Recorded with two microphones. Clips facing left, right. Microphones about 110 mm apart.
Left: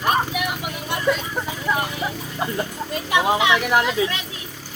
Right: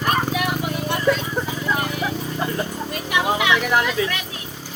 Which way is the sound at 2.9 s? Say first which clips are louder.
Left 3 dB; 25° left (ahead or behind).